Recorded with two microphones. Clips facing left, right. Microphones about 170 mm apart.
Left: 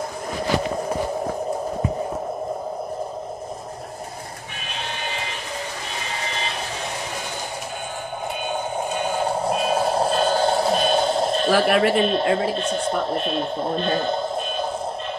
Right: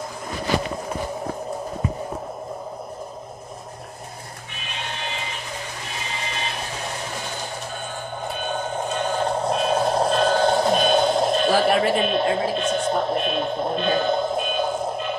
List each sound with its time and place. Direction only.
8.5 s vehicle: 10° left (ahead or behind)
11.8 s speech: centre (ahead or behind)